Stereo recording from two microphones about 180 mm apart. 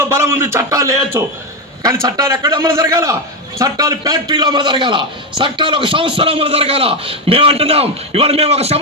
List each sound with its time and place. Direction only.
0.0 s a man's voice: 15° right (ahead or behind); by 8.8 s 35° right (ahead or behind)